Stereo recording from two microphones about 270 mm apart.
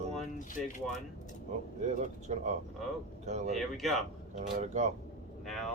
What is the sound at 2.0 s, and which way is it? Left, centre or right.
Speech, right.